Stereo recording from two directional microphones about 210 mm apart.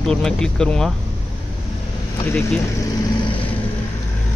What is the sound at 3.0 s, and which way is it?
Vehicle, 20° left (ahead or behind).